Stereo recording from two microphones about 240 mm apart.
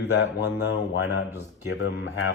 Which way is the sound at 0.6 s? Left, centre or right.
Left.